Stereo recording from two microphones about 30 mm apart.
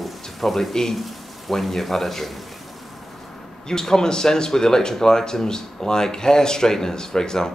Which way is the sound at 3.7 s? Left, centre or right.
Left.